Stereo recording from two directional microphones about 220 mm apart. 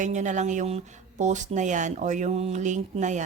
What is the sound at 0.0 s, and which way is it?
Speech, 35° right (ahead or behind).